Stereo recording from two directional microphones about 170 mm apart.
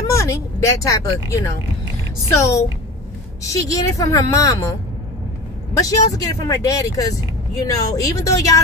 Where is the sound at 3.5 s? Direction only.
20° left (ahead or behind).